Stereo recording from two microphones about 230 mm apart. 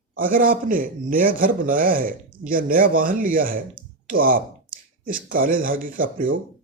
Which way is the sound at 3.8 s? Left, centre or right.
Right.